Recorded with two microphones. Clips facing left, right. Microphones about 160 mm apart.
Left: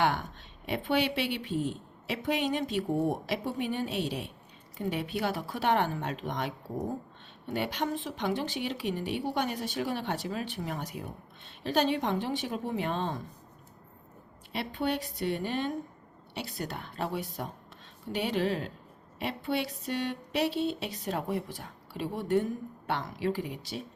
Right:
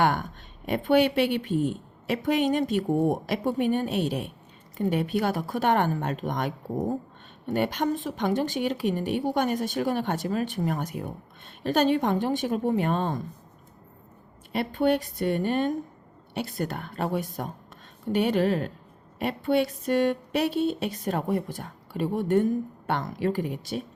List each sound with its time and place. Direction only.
0.0 s a woman's voice: 50° right (ahead or behind)
7.5 s a woman's voice: 50° right (ahead or behind)
14.5 s a woman's voice: 50° right (ahead or behind)